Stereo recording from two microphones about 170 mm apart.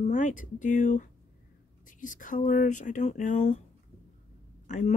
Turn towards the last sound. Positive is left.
turn(degrees=45)  # may be behind; listen again after turning